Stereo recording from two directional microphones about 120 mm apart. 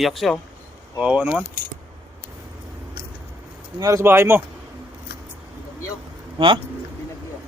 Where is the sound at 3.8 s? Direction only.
25° right (ahead or behind).